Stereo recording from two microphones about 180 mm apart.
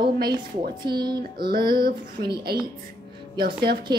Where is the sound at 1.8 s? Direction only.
60° right (ahead or behind).